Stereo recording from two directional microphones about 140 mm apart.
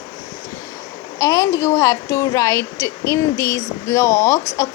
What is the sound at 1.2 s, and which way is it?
Speech, 25° left (ahead or behind).